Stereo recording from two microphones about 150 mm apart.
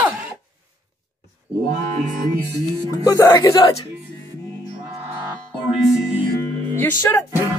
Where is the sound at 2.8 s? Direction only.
25° left (ahead or behind).